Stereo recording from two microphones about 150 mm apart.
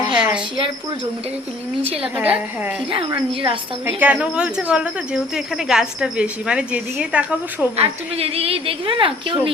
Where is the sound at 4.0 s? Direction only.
10° right (ahead or behind).